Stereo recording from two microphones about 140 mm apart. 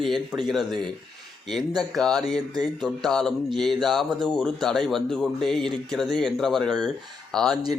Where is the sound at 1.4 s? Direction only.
Centre (ahead or behind).